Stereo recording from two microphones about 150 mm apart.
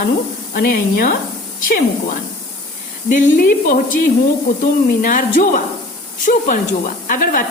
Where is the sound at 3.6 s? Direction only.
65° left (ahead or behind).